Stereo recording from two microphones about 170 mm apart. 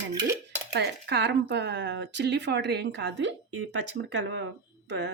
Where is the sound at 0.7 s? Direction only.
75° right (ahead or behind).